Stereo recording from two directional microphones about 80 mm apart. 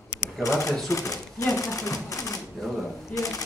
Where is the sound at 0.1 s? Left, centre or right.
Left.